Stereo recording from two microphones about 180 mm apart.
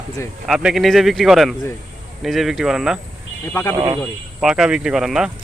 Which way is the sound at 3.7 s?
25° right (ahead or behind).